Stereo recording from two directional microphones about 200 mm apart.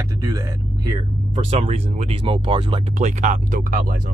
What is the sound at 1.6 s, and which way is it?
Speech, 35° right (ahead or behind).